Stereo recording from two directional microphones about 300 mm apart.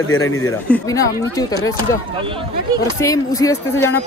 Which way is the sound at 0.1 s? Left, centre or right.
Left.